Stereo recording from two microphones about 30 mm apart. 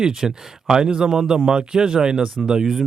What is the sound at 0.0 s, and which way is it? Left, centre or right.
Speech, centre.